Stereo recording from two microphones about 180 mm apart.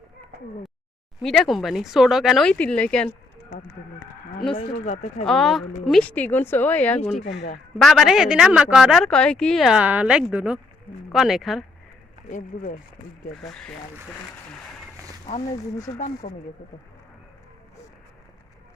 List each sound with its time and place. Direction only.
1.2 s a woman's voice: centre (ahead or behind)
4.5 s speech: 40° left (ahead or behind)
5.2 s a woman's voice: centre (ahead or behind)
12.3 s speech: 50° left (ahead or behind)
13.4 s a woman's voice: 5° left (ahead or behind)
15.5 s speech: 20° left (ahead or behind)
16.0 s speech: 50° left (ahead or behind)